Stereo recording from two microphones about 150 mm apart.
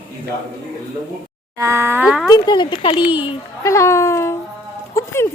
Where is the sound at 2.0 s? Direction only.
5° right (ahead or behind).